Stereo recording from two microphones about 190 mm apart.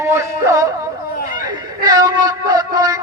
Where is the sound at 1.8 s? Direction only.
20° right (ahead or behind).